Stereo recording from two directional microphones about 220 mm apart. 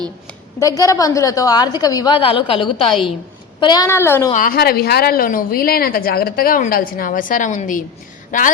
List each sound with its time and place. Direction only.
0.6 s a woman's voice: 15° left (ahead or behind)
4.3 s a woman's voice: 40° left (ahead or behind)